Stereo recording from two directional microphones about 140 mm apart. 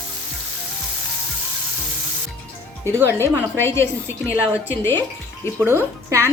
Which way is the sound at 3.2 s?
15° left (ahead or behind).